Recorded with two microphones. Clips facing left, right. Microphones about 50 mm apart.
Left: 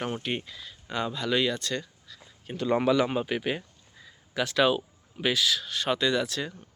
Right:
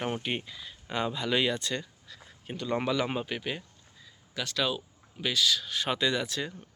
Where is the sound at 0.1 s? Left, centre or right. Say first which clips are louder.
Left 1 dB; centre.